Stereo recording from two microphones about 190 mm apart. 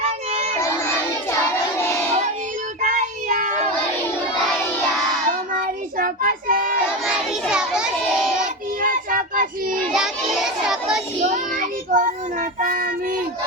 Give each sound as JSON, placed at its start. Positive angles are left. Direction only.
{"t": 0.0, "sound": "crowd", "side_deg": -35}
{"t": 1.4, "sound": "child singing", "side_deg": 15}
{"t": 2.8, "sound": "child singing", "side_deg": -40}
{"t": 5.3, "sound": "child singing", "side_deg": -45}
{"t": 7.0, "sound": "child singing", "side_deg": -5}
{"t": 8.8, "sound": "child singing", "side_deg": -45}
{"t": 9.9, "sound": "child singing", "side_deg": -5}
{"t": 11.3, "sound": "child singing", "side_deg": -45}